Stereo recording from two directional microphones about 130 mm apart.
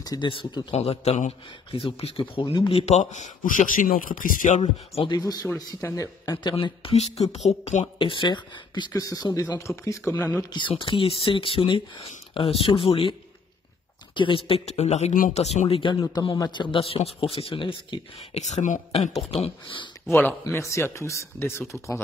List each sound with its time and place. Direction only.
0.0 s speech: 30° left (ahead or behind)
0.7 s a man's voice: 50° left (ahead or behind)
1.8 s a man's voice: 45° left (ahead or behind)
2.8 s a man's voice: 60° left (ahead or behind); by 4.6 s 90° left
4.6 s a man's voice: 50° left (ahead or behind)
5.1 s speech: 30° left (ahead or behind)
6.5 s speech: 45° left (ahead or behind); by 10.4 s 20° left (ahead or behind)
10.5 s a man's voice: 40° left (ahead or behind)
14.1 s speech: 40° left (ahead or behind)
14.7 s speech: 55° left (ahead or behind)
16.3 s a man's voice: 35° left (ahead or behind)
18.5 s speech: 75° left (ahead or behind)
18.9 s a man's voice: 50° left (ahead or behind)
20.1 s speech: 15° left (ahead or behind)